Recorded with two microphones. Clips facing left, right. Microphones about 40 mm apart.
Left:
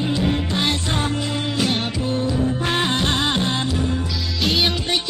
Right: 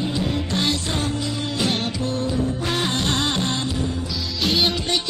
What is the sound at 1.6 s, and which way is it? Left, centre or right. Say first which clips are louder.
Music: even; centre.